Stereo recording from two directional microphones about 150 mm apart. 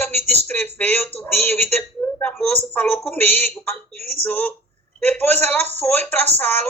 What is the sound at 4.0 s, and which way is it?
Speech, 45° right (ahead or behind).